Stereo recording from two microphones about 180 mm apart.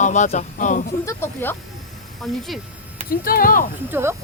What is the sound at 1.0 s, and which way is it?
Speech, 10° left (ahead or behind).